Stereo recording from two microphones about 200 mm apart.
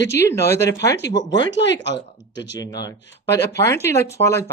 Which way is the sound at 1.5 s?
60° left (ahead or behind).